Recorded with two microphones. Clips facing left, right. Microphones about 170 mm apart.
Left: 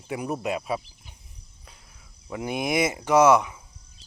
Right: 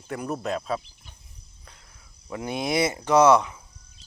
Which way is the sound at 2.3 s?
15° left (ahead or behind).